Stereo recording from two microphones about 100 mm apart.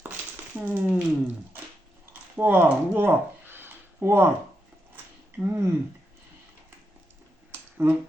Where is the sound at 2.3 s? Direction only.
20° right (ahead or behind).